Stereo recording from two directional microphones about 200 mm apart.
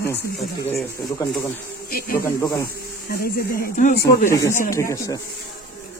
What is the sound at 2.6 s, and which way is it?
Speech, 50° left (ahead or behind).